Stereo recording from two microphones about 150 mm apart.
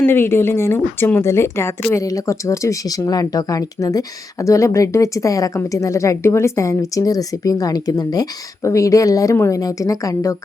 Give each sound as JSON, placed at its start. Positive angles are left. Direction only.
{"t": 0.0, "sound": "a woman's voice", "side_deg": 15}